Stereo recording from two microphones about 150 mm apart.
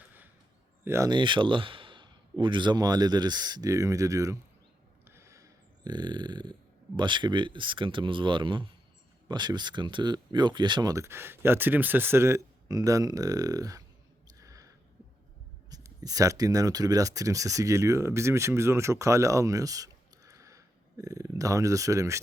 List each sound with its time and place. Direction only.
0.9 s speech: 20° right (ahead or behind)
1.1 s speech: 35° right (ahead or behind)
5.0 s a sound: 20° right (ahead or behind)
6.9 s speech: 30° right (ahead or behind)
14.3 s a sound: 20° right (ahead or behind)
15.7 s speech: 25° right (ahead or behind)